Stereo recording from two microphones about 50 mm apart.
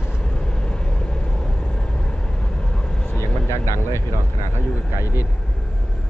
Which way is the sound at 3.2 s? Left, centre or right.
Left.